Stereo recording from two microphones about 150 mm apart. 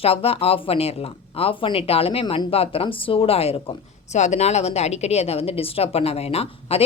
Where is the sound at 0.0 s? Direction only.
40° left (ahead or behind).